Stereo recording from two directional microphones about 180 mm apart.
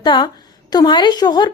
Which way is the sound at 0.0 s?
25° left (ahead or behind).